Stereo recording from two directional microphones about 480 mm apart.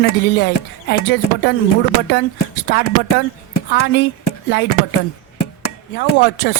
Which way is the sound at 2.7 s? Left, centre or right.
Centre.